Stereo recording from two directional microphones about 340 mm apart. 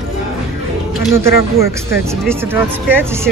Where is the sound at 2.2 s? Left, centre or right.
Centre.